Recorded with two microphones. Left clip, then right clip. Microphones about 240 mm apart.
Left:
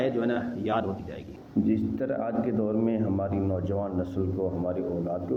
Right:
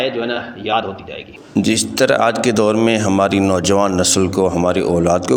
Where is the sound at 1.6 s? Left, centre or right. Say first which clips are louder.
Right 13 dB; right.